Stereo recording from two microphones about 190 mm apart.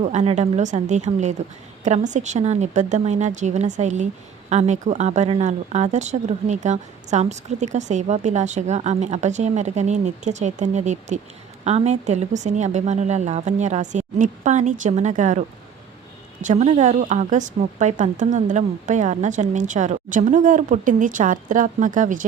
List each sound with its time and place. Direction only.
0.0 s speech: 35° right (ahead or behind)